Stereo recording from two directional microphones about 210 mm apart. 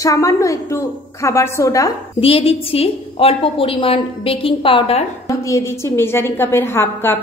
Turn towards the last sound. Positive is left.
turn(degrees=10)  # may be behind; listen again after turning